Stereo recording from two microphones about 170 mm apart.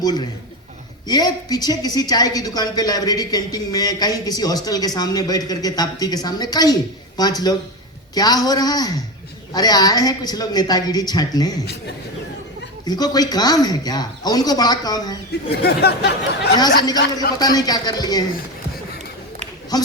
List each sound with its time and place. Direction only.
1.0 s a woman's voice: 20° left (ahead or behind)
12.8 s a woman's voice: 25° left (ahead or behind)
15.5 s speech: 70° left (ahead or behind)
16.6 s a woman's voice: 25° left (ahead or behind)
19.7 s a woman's voice: 20° left (ahead or behind)